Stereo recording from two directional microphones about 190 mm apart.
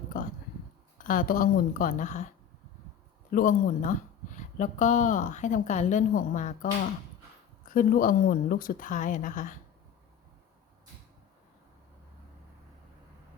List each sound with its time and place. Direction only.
0.9 s a woman's voice: 45° left (ahead or behind)
3.3 s a woman's voice: 45° left (ahead or behind)
7.7 s a woman's voice: 45° left (ahead or behind)